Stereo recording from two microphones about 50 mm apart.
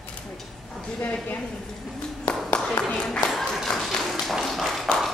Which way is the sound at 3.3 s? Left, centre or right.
Centre.